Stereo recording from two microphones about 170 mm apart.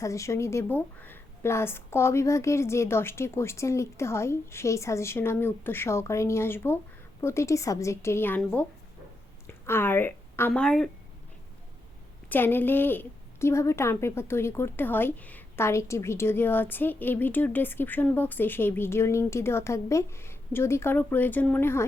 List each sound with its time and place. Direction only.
0.0 s a woman's voice: 20° left (ahead or behind)
12.3 s a woman's voice: 10° left (ahead or behind)